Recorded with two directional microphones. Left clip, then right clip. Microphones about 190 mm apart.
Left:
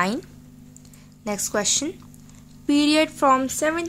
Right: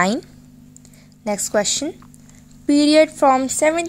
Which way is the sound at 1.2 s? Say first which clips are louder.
Right 5 dB; 20° right (ahead or behind).